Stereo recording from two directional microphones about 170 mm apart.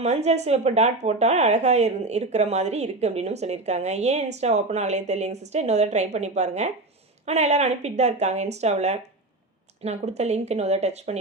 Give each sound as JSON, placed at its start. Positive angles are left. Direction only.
{"t": 0.0, "sound": "speech", "side_deg": -40}